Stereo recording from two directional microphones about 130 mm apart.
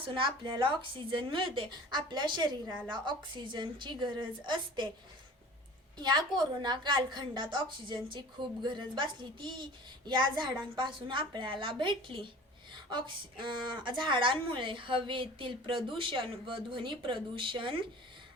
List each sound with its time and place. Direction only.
0.1 s a woman's voice: 40° right (ahead or behind)
6.0 s a woman's voice: 35° right (ahead or behind)